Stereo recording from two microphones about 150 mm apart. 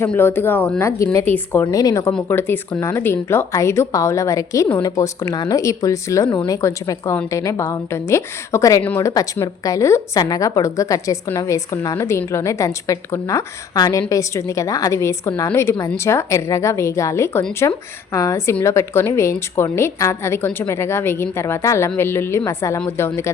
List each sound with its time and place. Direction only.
0.0 s a woman's voice: 15° left (ahead or behind)
1.6 s a woman's voice: 25° left (ahead or behind)